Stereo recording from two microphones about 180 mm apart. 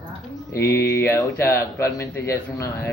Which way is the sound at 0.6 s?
70° left (ahead or behind).